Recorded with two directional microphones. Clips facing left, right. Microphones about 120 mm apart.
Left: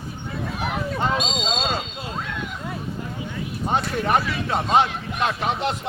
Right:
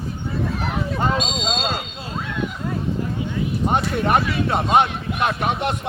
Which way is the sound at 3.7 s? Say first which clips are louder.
Right 1 dB; 20° right (ahead or behind).